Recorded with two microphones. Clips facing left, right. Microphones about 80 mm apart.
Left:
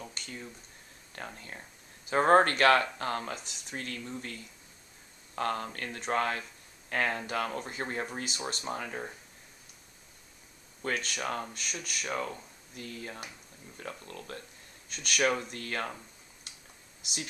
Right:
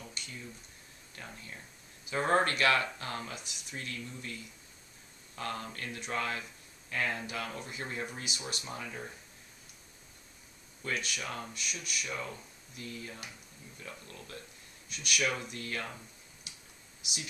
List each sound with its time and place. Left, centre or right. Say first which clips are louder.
0.2 s a sound: left 1 dB; left
1.1 s speech: left 4 dB; left
5.3 s speech: left 6 dB; left
10.8 s speech: left 3 dB; left